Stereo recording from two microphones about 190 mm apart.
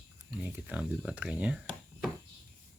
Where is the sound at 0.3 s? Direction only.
5° right (ahead or behind).